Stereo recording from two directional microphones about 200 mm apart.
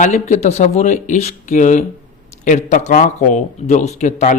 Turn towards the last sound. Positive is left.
turn(degrees=35)  # may be behind; listen again after turning